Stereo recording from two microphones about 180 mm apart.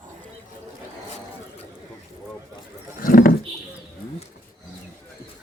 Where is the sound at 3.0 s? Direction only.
50° left (ahead or behind).